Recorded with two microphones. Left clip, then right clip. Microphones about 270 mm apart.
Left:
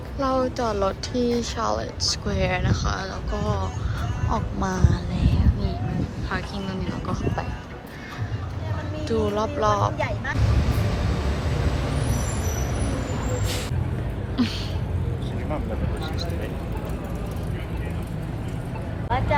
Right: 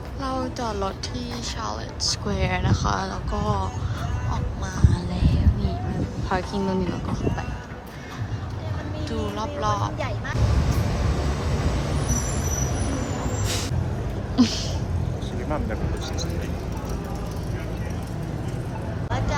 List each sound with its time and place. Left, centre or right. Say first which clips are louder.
0.2 s speech: left 5 dB; centre
4.3 s music: left 6 dB; centre
6.3 s speech: right 5 dB; centre
7.1 s speech: left 1 dB; centre
9.0 s speech: left 6 dB; centre
14.3 s a sound: right 4 dB; centre